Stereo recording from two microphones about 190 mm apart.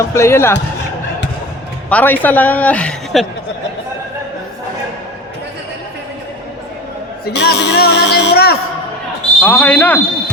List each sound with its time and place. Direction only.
0.1 s a woman's voice: 15° left (ahead or behind)
1.9 s a woman's voice: 10° left (ahead or behind)
7.3 s speech: 60° left (ahead or behind)
9.4 s a woman's voice: 10° left (ahead or behind)